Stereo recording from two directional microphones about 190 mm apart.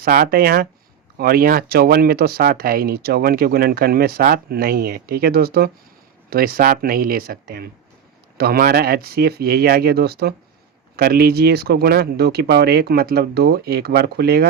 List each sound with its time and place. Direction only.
0.0 s speech: 50° right (ahead or behind)